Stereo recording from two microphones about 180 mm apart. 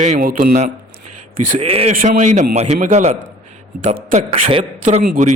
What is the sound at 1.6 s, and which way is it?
A man's voice, 35° right (ahead or behind).